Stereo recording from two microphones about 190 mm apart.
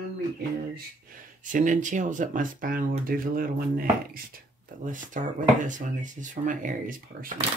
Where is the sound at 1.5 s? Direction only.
40° right (ahead or behind).